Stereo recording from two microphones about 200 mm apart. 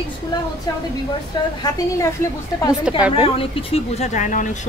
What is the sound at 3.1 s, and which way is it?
Speech, 25° left (ahead or behind).